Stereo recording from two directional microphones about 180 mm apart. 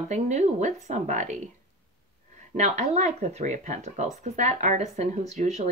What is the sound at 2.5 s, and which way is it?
Speech, 40° right (ahead or behind).